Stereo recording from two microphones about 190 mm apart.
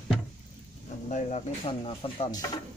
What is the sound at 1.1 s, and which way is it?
Speech, 35° left (ahead or behind).